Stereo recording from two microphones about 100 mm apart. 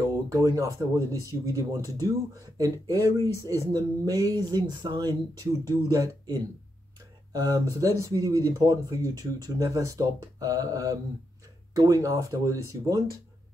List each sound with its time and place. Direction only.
0.3 s speech: 30° right (ahead or behind)